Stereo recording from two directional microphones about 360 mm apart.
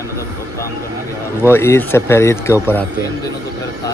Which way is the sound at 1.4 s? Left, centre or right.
Centre.